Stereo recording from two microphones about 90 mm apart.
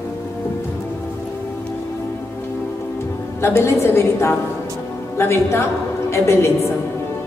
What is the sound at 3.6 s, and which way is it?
A woman's voice, 30° left (ahead or behind).